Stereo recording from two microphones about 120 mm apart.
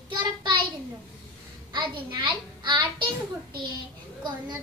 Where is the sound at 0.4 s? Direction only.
40° right (ahead or behind).